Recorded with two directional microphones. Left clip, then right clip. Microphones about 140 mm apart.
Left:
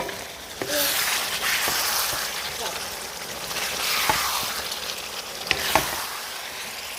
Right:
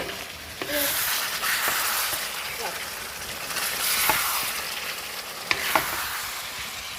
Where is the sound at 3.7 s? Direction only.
10° left (ahead or behind).